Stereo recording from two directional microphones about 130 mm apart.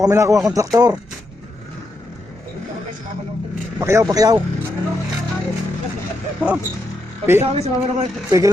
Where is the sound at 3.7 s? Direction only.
25° right (ahead or behind).